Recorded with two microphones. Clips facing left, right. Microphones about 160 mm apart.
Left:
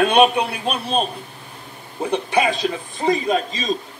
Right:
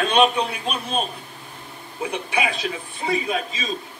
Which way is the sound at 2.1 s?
35° left (ahead or behind).